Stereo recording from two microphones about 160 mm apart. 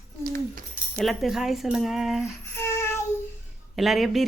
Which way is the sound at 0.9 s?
Centre (ahead or behind).